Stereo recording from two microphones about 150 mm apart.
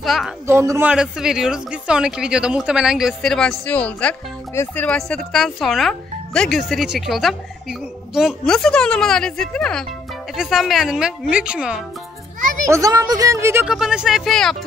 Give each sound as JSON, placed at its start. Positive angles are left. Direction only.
{"t": 0.0, "sound": "a woman's voice", "side_deg": 0}
{"t": 0.5, "sound": "a man's voice", "side_deg": -20}
{"t": 0.8, "sound": "speech", "side_deg": -5}
{"t": 12.6, "sound": "speech", "side_deg": -20}
{"t": 13.7, "sound": "speech", "side_deg": -5}